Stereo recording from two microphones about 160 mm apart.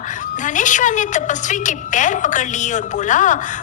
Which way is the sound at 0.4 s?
50° left (ahead or behind).